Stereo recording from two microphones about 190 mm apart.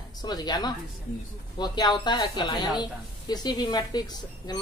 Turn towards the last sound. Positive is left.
turn(degrees=20)  # may be behind; listen again after turning